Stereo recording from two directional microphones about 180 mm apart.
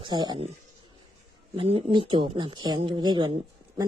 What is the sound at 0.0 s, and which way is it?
Speech, 25° right (ahead or behind).